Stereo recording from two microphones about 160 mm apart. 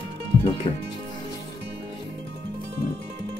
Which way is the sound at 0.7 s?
40° left (ahead or behind).